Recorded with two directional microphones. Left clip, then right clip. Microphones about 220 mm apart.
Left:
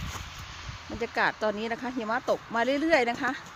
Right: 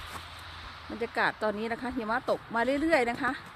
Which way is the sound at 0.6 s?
5° left (ahead or behind).